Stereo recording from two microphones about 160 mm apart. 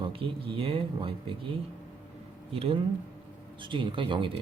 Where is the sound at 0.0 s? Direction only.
35° right (ahead or behind).